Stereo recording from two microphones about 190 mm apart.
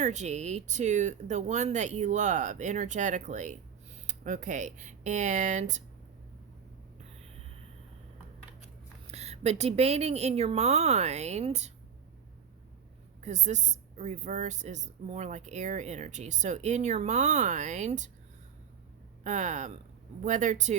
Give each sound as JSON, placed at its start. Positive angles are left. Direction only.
{"t": 0.0, "sound": "speech", "side_deg": -40}
{"t": 9.1, "sound": "speech", "side_deg": -35}
{"t": 13.2, "sound": "speech", "side_deg": -40}
{"t": 19.2, "sound": "speech", "side_deg": -40}